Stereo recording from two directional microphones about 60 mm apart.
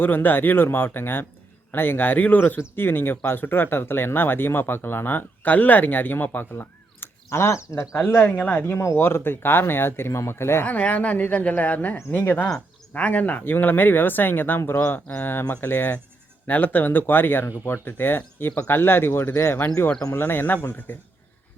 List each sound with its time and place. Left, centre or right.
0.0 s speech: left
8.6 s speech: left
10.1 s speech: left
10.7 s speech: left
13.4 s speech: left